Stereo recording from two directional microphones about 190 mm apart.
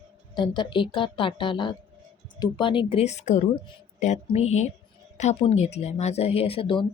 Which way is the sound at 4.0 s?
40° left (ahead or behind).